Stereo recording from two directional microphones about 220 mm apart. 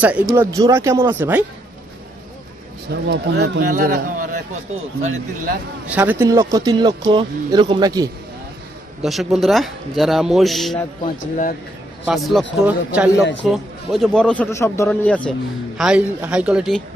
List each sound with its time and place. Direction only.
0.0 s speech: 5° right (ahead or behind)
2.9 s speech: 50° right (ahead or behind)
3.5 s a man's voice: 35° right (ahead or behind)
5.9 s speech: 5° right (ahead or behind)
9.0 s a man's voice: centre (ahead or behind)
12.1 s a man's voice: centre (ahead or behind)